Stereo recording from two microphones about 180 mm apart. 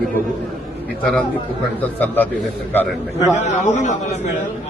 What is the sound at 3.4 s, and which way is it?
A man's voice, 40° left (ahead or behind).